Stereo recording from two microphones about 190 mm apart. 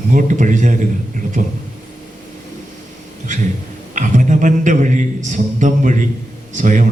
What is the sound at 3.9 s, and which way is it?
A man's voice, 40° right (ahead or behind).